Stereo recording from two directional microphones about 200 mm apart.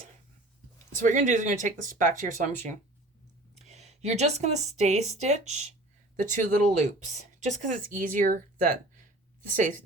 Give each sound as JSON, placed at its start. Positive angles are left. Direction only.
{"t": 0.9, "sound": "speech", "side_deg": -40}